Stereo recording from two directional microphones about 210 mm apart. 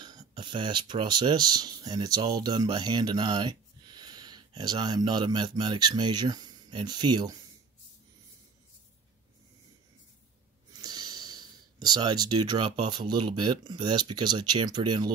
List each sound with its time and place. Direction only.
0.0 s speech: 20° right (ahead or behind)
10.7 s a sound: 20° right (ahead or behind)
12.9 s speech: 20° right (ahead or behind)